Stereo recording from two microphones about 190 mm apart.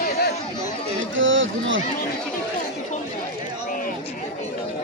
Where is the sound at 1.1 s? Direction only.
90° right.